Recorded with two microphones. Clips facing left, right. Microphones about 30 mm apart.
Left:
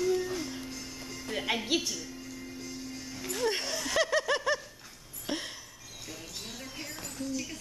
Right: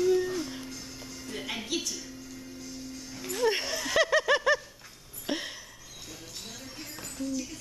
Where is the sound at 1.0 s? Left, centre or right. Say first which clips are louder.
Left 5 dB; centre.